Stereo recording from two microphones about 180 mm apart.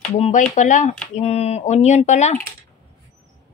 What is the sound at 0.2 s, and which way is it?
Speech, 45° left (ahead or behind).